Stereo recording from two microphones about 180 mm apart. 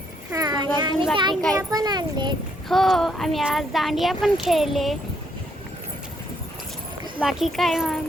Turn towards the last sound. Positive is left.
turn(degrees=0)  # may be behind; listen again after turning